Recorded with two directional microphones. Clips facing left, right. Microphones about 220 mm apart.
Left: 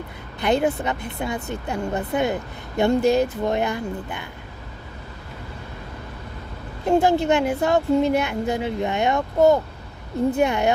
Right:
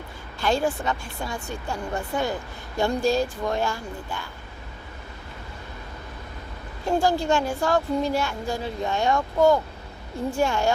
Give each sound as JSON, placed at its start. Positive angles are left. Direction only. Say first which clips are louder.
{"t": 0.3, "sound": "speech", "louder": "left 3 dB", "side_deg": 20}
{"t": 6.8, "sound": "speech", "louder": "left 4 dB", "side_deg": 20}